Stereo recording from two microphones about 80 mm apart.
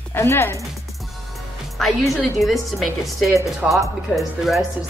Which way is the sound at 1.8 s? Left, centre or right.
Centre.